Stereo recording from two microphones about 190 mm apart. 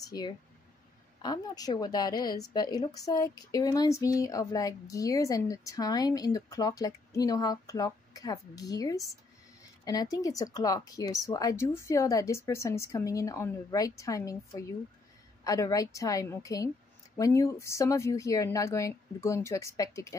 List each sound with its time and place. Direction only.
0.0 s a woman's voice: 20° left (ahead or behind)